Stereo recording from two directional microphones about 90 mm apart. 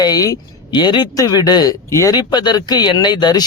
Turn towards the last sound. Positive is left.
turn(degrees=50)  # may be behind; listen again after turning